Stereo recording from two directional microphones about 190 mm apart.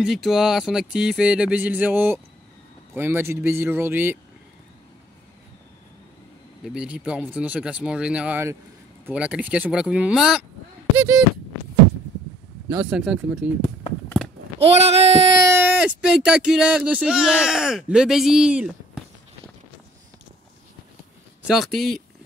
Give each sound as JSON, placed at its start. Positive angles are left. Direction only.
{"t": 0.0, "sound": "speech", "side_deg": 0}
{"t": 6.6, "sound": "speech", "side_deg": -5}
{"t": 12.6, "sound": "speech", "side_deg": -5}
{"t": 14.6, "sound": "child singing", "side_deg": -30}
{"t": 15.4, "sound": "speech", "side_deg": -10}
{"t": 21.5, "sound": "speech", "side_deg": 0}